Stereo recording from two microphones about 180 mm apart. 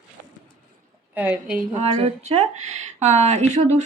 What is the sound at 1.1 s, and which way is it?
Speech, 5° right (ahead or behind).